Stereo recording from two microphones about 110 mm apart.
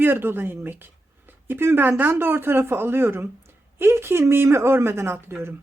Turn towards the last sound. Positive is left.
turn(degrees=-20)  # may be behind; listen again after turning